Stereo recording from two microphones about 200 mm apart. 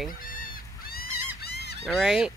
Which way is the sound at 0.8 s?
50° left (ahead or behind).